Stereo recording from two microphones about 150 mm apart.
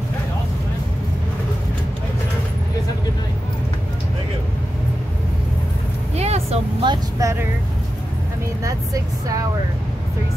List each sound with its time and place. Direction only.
6.1 s vehicle: 45° right (ahead or behind)
6.8 s vehicle: 25° right (ahead or behind)
8.6 s vehicle: 20° right (ahead or behind)